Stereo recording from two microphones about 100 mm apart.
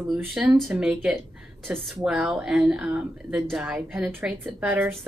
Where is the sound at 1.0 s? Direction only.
Centre (ahead or behind).